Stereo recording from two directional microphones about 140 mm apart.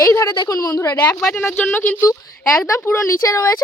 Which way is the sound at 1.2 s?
5° left (ahead or behind).